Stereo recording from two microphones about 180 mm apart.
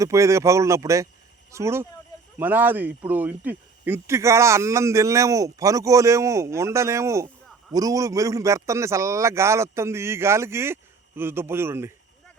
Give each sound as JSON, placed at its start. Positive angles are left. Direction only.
{"t": 0.0, "sound": "speech", "side_deg": -15}